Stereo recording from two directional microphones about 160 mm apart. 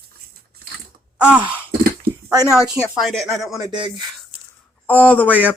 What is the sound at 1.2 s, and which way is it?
Speech, 10° right (ahead or behind).